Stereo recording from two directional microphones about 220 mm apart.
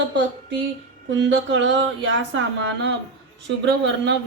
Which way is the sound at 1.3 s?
55° right (ahead or behind).